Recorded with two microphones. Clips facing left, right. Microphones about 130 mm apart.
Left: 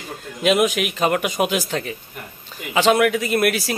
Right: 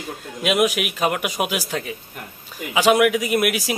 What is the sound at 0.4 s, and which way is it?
A man's voice, 5° right (ahead or behind).